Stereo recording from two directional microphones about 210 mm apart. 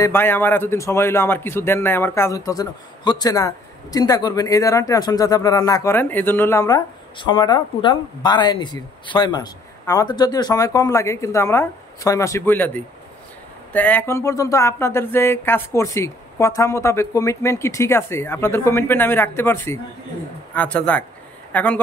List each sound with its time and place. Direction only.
0.0 s a man's voice: 10° left (ahead or behind)